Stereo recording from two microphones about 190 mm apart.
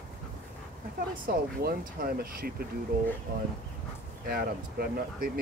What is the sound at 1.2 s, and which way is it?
Speech, 50° right (ahead or behind).